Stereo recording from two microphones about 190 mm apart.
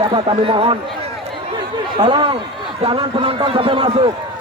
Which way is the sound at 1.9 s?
25° right (ahead or behind).